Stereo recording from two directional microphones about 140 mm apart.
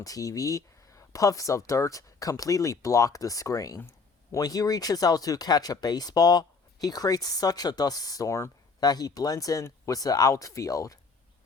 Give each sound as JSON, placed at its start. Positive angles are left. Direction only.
{"t": 0.0, "sound": "speech", "side_deg": 25}